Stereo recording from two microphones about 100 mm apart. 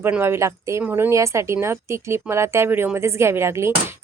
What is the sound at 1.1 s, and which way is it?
Speech, 30° right (ahead or behind).